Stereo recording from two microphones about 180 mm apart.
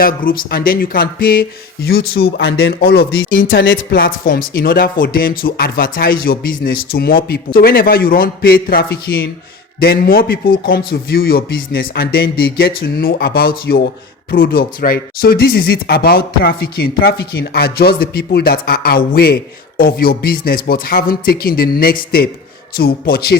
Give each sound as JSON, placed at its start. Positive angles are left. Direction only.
{"t": 0.0, "sound": "speech", "side_deg": 50}
{"t": 2.4, "sound": "speech", "side_deg": 65}
{"t": 3.6, "sound": "speech", "side_deg": 90}
{"t": 4.2, "sound": "speech", "side_deg": 50}